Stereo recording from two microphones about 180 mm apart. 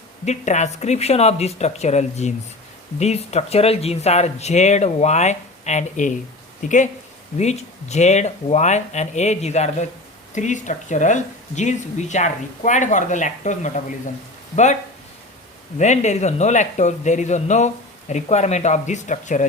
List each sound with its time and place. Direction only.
0.3 s speech: 40° left (ahead or behind)
15.8 s speech: 40° left (ahead or behind)